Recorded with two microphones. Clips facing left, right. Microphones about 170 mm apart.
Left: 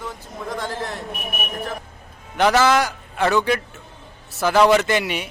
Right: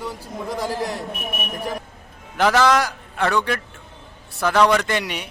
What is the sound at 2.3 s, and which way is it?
A man's voice, centre (ahead or behind).